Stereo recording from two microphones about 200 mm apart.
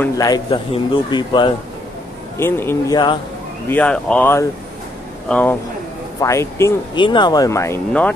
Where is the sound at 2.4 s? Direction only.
10° left (ahead or behind).